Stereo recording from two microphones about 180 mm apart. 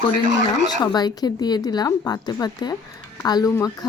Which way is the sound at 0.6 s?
20° left (ahead or behind).